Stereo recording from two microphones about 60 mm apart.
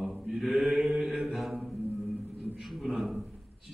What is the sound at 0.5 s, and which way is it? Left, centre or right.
Mantra, centre.